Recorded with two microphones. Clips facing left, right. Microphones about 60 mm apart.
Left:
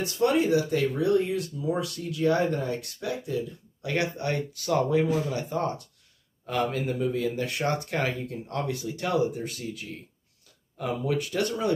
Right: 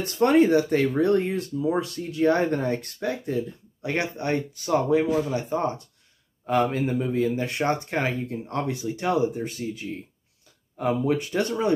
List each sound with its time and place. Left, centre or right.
0.0 s speech: right